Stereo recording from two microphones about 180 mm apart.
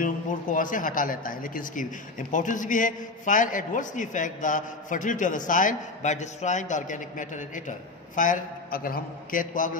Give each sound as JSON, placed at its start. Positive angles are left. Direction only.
{"t": 0.0, "sound": "speech", "side_deg": 45}